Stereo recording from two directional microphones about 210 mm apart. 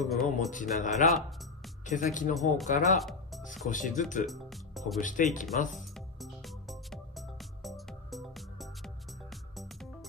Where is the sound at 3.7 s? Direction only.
35° left (ahead or behind).